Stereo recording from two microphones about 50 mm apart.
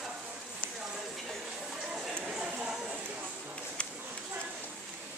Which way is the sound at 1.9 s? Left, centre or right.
Centre.